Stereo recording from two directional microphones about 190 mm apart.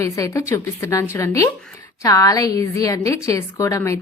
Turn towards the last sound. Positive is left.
turn(degrees=15)  # may be behind; listen again after turning